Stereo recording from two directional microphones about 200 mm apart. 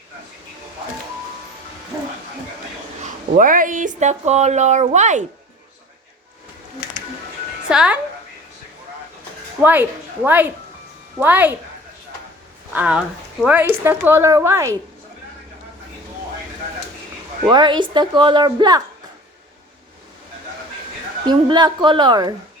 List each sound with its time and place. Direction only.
3.0 s speech: 40° right (ahead or behind)
7.7 s speech: 5° right (ahead or behind)
9.6 s speech: 10° right (ahead or behind)
12.7 s speech: 5° right (ahead or behind)
17.4 s a woman's voice: 20° right (ahead or behind)
21.2 s a woman's voice: 20° right (ahead or behind)